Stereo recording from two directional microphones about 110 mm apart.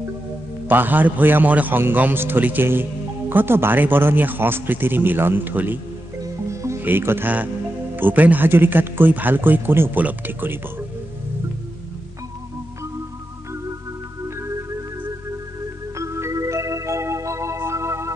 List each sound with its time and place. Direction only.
0.7 s a man's voice: 15° right (ahead or behind)
6.5 s music: 25° right (ahead or behind)
6.8 s a man's voice: 20° right (ahead or behind)
16.0 s music: 25° right (ahead or behind)